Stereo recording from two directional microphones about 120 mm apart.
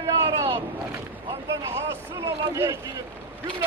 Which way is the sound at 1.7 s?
20° right (ahead or behind).